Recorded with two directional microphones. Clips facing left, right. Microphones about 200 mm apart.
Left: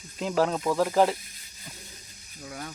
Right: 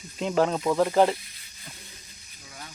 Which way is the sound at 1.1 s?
45° left (ahead or behind).